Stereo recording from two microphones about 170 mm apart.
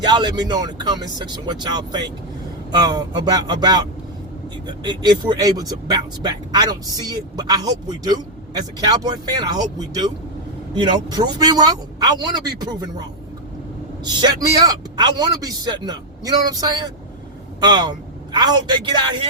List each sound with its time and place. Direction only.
0.0 s speech: 25° right (ahead or behind)